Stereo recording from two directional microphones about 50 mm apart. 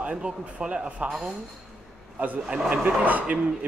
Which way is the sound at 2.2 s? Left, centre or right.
Right.